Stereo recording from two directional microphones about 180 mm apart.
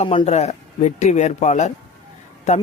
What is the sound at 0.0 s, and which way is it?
A man's voice, 35° left (ahead or behind).